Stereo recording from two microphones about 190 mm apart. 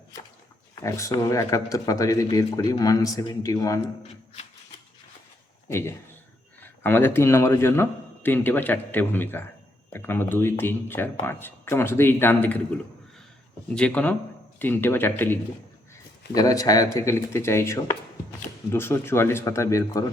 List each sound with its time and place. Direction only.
0.8 s speech: 15° left (ahead or behind)
5.6 s speech: 15° left (ahead or behind)
13.7 s speech: 5° left (ahead or behind)